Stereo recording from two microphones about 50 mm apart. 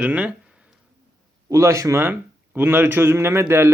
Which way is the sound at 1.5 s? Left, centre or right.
Right.